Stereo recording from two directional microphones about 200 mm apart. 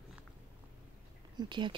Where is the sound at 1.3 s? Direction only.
20° right (ahead or behind).